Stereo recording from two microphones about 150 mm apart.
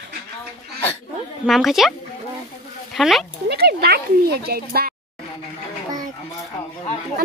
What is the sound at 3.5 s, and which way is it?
Speech, 90° right.